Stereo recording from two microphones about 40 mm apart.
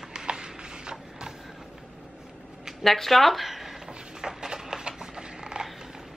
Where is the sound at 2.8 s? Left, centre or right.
Centre.